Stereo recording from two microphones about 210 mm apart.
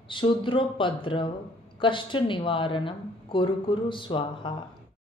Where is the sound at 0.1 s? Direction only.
25° left (ahead or behind).